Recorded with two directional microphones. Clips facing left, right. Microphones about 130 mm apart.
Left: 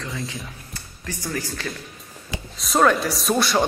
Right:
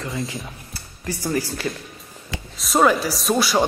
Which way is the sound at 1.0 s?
10° right (ahead or behind).